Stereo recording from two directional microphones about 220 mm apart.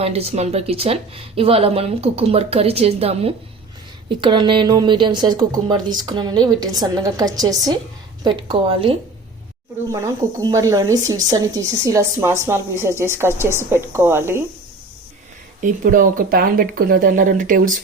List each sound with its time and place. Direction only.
0.0 s speech: 25° right (ahead or behind); by 14.4 s 10° right (ahead or behind)
15.6 s speech: 40° right (ahead or behind)